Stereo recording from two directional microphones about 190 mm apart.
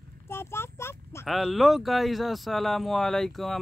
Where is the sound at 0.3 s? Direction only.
10° left (ahead or behind).